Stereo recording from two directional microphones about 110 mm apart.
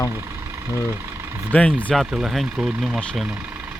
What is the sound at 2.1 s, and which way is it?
Speech, 5° right (ahead or behind).